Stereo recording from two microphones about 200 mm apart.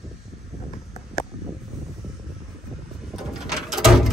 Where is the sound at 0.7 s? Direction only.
30° left (ahead or behind).